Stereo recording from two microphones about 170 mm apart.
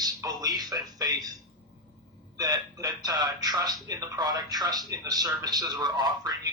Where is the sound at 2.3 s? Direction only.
20° right (ahead or behind).